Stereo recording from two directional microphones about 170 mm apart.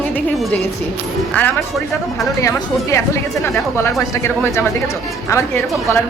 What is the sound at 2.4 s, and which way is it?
A woman's voice, 20° left (ahead or behind).